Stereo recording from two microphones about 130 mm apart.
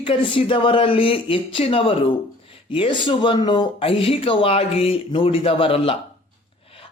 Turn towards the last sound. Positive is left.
turn(degrees=45)  # may be behind; listen again after turning